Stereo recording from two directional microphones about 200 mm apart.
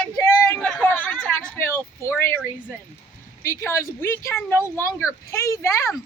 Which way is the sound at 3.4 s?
15° left (ahead or behind).